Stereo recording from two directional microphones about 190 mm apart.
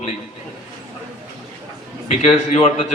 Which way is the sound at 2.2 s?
35° left (ahead or behind).